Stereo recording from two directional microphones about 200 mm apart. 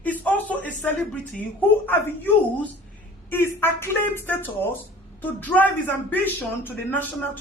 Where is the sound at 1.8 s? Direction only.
10° left (ahead or behind).